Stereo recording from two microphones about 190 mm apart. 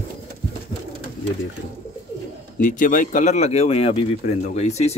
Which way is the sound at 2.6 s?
45° left (ahead or behind).